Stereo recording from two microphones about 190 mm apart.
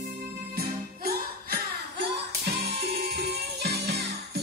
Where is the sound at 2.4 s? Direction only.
60° right (ahead or behind).